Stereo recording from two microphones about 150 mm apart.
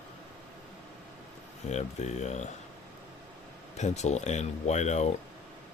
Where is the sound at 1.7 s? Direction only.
50° left (ahead or behind).